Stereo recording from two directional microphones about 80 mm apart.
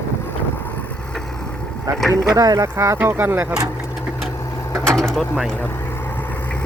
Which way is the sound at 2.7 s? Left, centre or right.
Right.